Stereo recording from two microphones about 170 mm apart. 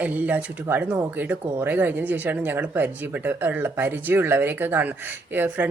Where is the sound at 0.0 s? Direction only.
10° right (ahead or behind).